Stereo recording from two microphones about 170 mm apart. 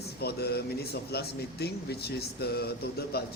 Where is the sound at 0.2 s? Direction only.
70° left (ahead or behind).